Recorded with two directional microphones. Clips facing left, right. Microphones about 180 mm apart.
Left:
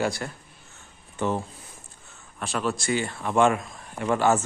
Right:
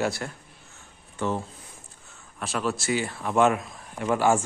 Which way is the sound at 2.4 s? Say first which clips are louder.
Even; centre (ahead or behind).